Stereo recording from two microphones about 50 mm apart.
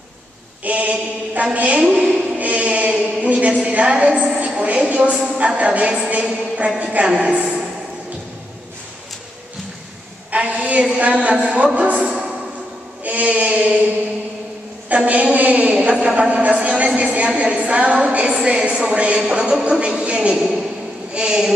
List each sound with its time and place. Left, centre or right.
0.7 s a woman's voice: right
2.3 s chant: right
3.2 s a woman's voice: right
10.3 s a woman's voice: right
14.9 s a woman's voice: right; by 21.5 s centre